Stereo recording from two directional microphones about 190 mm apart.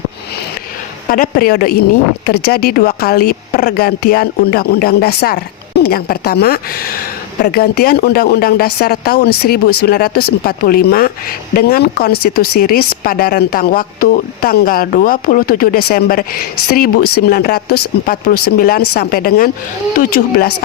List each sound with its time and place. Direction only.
1.0 s speech: 45° left (ahead or behind)